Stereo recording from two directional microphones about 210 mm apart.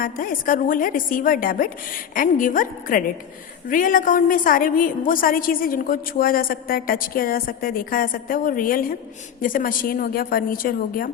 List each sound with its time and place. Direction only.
0.0 s a woman's voice: 40° left (ahead or behind)